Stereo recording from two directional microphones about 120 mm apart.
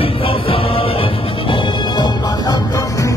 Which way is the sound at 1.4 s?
35° left (ahead or behind).